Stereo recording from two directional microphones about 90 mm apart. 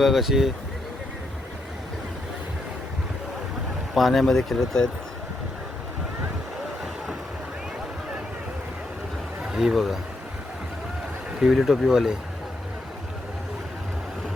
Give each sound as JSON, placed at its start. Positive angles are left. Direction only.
{"t": 0.0, "sound": "speech", "side_deg": -5}
{"t": 3.9, "sound": "speech", "side_deg": 0}
{"t": 9.4, "sound": "speech", "side_deg": -5}
{"t": 11.3, "sound": "speech", "side_deg": -5}